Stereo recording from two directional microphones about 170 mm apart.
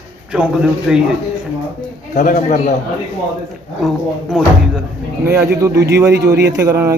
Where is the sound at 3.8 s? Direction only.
Centre (ahead or behind).